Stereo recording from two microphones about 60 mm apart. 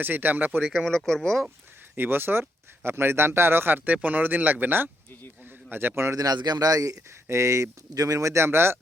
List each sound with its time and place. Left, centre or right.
0.0 s speech: right
0.7 s speech: centre
2.0 s speech: right
6.1 s speech: right
7.3 s speech: right